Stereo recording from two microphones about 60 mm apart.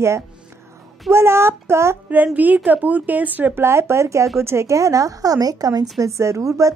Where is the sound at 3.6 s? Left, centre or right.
Right.